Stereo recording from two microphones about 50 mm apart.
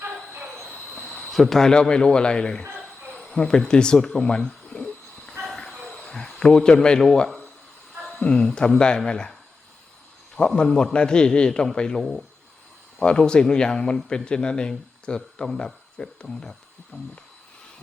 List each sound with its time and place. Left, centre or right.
1.3 s a man's voice: centre
3.2 s a sound: centre
3.6 s a man's voice: centre
5.4 s train: centre
6.0 s a man's voice: centre
10.3 s a man's voice: centre
13.0 s a man's voice: left
16.9 s a sound: left